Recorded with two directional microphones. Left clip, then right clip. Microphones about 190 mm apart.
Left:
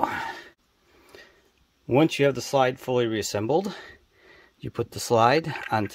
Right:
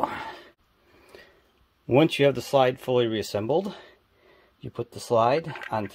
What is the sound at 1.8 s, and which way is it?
Speech, 5° left (ahead or behind).